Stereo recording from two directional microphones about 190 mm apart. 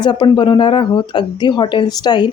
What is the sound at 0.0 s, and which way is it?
Speech, 25° left (ahead or behind).